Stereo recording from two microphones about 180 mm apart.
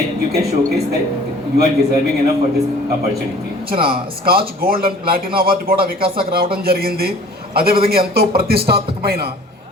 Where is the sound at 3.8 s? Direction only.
55° right (ahead or behind).